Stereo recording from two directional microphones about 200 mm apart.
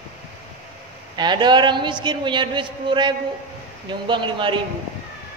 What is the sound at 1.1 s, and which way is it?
A man's voice, 20° right (ahead or behind).